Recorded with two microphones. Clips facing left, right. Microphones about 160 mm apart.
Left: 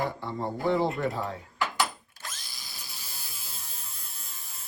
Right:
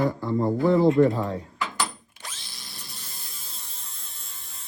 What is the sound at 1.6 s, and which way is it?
Door, centre (ahead or behind).